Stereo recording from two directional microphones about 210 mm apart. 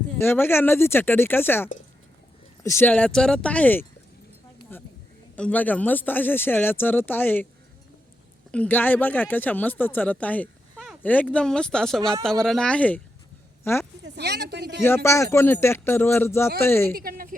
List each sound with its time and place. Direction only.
0.2 s speech: 10° left (ahead or behind)
8.5 s speech: 10° left (ahead or behind)
14.0 s a sound: 50° right (ahead or behind)
14.8 s speech: 10° left (ahead or behind)
16.9 s speech: 45° right (ahead or behind)